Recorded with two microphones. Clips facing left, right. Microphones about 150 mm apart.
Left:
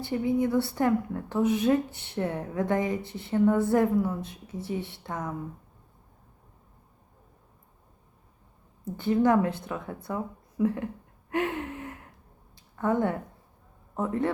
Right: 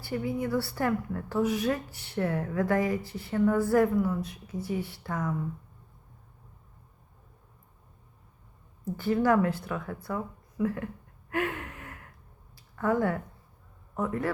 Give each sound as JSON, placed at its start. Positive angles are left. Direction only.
{"t": 0.0, "sound": "a woman's voice", "side_deg": 20}
{"t": 9.0, "sound": "a woman's voice", "side_deg": 20}
{"t": 11.3, "sound": "gasp", "side_deg": 25}
{"t": 12.7, "sound": "a man's voice", "side_deg": 20}